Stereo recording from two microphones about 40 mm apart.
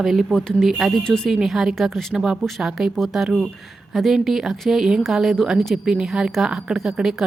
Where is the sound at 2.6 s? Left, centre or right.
Centre.